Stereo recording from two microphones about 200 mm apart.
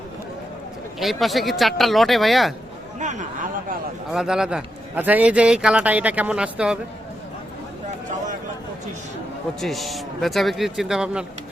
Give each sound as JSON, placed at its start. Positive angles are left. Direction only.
{"t": 0.9, "sound": "a man's voice", "side_deg": 0}
{"t": 3.0, "sound": "speech", "side_deg": -35}
{"t": 4.1, "sound": "a man's voice", "side_deg": -5}
{"t": 9.6, "sound": "a man's voice", "side_deg": 0}